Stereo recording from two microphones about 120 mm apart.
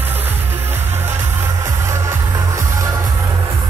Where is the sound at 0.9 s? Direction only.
20° right (ahead or behind).